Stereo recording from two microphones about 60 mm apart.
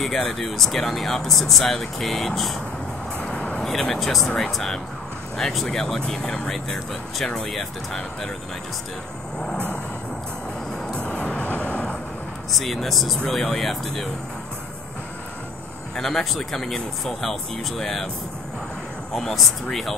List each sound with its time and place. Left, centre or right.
0.0 s speech: centre
3.2 s vehicle: left
3.6 s speech: centre
11.0 s vehicle: centre
12.4 s speech: centre
16.0 s speech: centre
19.1 s speech: centre